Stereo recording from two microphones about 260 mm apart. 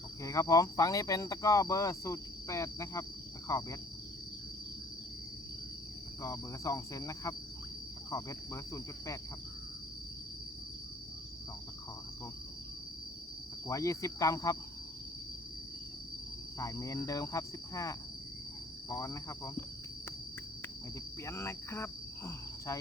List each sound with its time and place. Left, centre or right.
0.2 s speech: centre
6.2 s speech: centre
13.7 s speech: centre
16.6 s speech: centre
21.2 s speech: centre